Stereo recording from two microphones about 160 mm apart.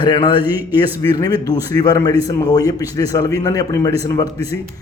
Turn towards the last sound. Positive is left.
turn(degrees=20)  # may be behind; listen again after turning